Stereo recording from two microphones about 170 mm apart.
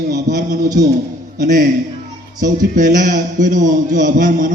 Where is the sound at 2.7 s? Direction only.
50° right (ahead or behind).